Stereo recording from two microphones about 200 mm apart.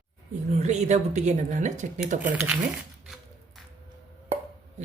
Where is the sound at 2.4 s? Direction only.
5° right (ahead or behind).